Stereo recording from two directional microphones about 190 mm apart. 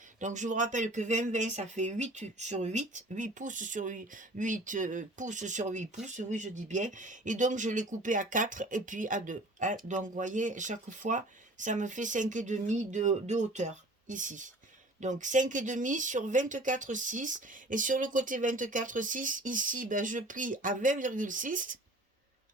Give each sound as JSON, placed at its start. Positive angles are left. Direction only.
{"t": 0.2, "sound": "speech", "side_deg": -40}